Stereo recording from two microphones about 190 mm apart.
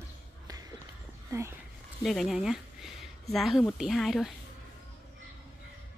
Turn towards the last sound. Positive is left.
turn(degrees=0)  # may be behind; listen again after turning